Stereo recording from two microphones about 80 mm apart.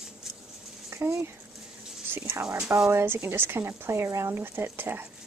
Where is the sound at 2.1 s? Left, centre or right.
Right.